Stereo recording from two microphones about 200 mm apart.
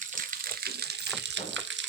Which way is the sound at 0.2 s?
45° right (ahead or behind).